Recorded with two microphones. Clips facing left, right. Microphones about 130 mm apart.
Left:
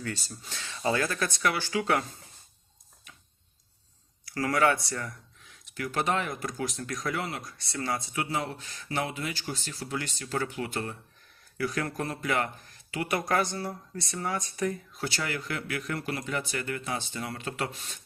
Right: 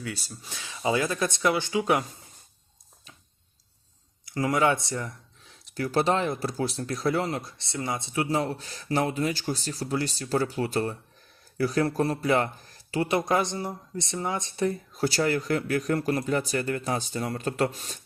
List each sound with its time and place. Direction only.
0.0 s speech: 10° right (ahead or behind)
4.3 s speech: 20° right (ahead or behind)
5.4 s speech: 35° right (ahead or behind)
7.6 s speech: 20° right (ahead or behind); by 18.0 s 40° right (ahead or behind)